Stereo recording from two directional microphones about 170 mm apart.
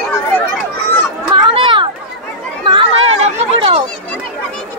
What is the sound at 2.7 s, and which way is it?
Chatter, 35° right (ahead or behind).